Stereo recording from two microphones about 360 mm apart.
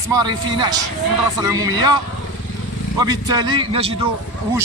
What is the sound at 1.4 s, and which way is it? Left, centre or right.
Speech, centre.